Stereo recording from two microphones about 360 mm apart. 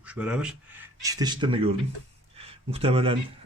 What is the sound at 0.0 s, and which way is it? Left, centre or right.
Speech, centre.